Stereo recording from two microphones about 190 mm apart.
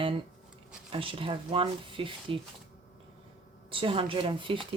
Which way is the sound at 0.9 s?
30° right (ahead or behind).